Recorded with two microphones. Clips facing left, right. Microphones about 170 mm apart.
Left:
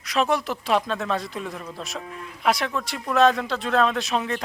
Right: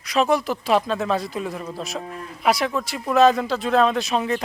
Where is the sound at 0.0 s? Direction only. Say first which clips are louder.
Right 3 dB; centre (ahead or behind).